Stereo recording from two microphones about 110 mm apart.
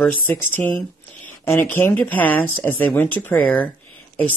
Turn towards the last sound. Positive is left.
turn(degrees=15)  # may be behind; listen again after turning